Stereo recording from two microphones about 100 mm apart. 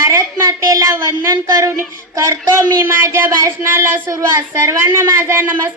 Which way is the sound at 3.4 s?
25° right (ahead or behind).